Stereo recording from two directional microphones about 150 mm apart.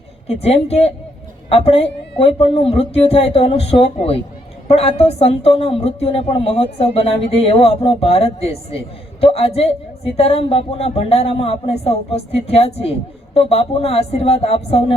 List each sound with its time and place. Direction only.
0.3 s a woman's voice: 45° left (ahead or behind)